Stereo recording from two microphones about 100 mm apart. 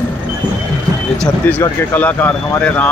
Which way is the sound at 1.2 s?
15° left (ahead or behind).